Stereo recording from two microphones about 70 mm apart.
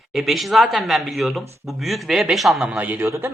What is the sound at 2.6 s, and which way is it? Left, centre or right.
Speech, right.